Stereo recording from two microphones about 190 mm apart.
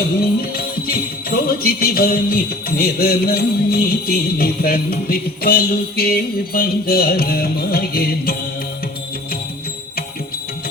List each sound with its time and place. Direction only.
0.2 s music: 50° left (ahead or behind)